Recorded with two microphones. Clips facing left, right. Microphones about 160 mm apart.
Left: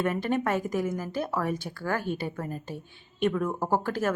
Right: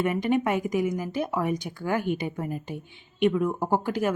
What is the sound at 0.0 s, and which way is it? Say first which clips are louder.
Speech: right 3 dB; 15° right (ahead or behind).